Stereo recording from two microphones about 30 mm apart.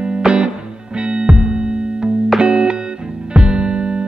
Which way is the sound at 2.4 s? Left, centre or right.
Right.